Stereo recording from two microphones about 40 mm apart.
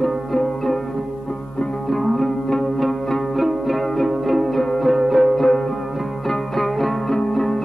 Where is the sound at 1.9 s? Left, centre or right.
Centre.